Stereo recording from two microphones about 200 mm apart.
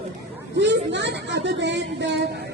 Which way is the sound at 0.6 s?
60° right (ahead or behind).